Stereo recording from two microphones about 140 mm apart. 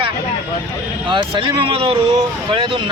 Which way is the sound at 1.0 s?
40° right (ahead or behind).